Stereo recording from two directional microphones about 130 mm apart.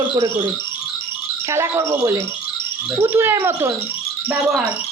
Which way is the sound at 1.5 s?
20° right (ahead or behind).